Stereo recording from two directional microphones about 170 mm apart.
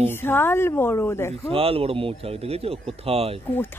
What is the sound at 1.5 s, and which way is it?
A man's voice, 35° right (ahead or behind).